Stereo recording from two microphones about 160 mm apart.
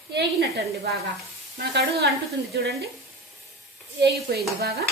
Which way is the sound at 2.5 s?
80° right.